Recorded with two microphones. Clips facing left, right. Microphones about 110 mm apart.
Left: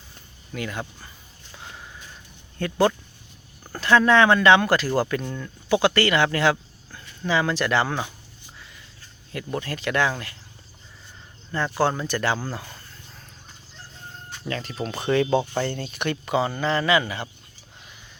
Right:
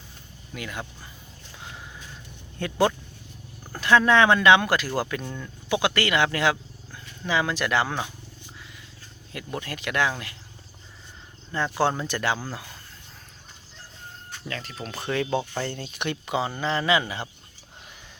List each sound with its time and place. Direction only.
0.5 s speech: 5° right (ahead or behind)
2.6 s speech: 15° right (ahead or behind)
9.3 s speech: 10° right (ahead or behind)
11.5 s speech: 15° right (ahead or behind)
14.4 s speech: 5° left (ahead or behind)
15.6 s speech: 10° right (ahead or behind)